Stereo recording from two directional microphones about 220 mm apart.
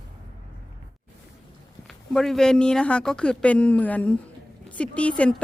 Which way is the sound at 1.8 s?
Centre (ahead or behind).